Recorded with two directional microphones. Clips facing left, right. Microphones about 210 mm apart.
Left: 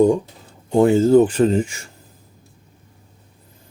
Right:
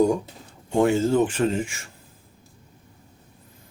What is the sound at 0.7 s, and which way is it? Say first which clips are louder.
Speech: left 7 dB; 35° left (ahead or behind).